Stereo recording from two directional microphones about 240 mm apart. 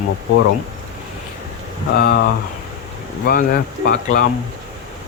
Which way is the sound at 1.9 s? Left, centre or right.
Left.